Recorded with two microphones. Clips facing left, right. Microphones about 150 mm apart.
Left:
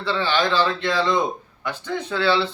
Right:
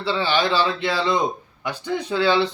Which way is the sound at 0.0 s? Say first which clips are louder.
Right 1 dB; 10° right (ahead or behind).